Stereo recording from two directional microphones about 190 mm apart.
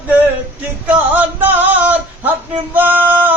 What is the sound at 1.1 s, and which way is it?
Synthetic singing, 10° right (ahead or behind).